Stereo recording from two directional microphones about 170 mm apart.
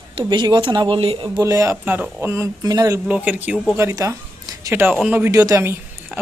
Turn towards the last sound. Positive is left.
turn(degrees=-15)  # may be behind; listen again after turning